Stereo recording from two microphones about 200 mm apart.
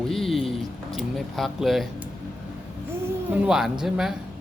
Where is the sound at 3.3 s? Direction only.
5° right (ahead or behind).